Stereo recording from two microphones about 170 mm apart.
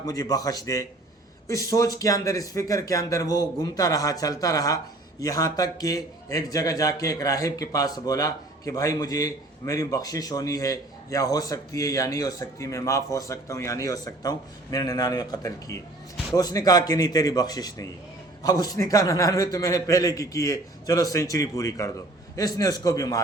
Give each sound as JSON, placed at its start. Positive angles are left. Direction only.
{"t": 0.0, "sound": "a man's voice", "side_deg": 20}